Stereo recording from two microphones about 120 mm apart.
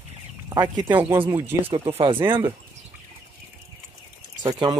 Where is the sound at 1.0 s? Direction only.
50° right (ahead or behind).